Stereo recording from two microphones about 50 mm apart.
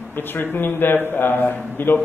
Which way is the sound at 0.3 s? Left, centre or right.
Left.